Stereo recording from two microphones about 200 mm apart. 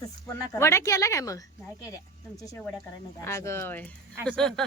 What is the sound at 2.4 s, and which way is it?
A woman's voice, 15° left (ahead or behind).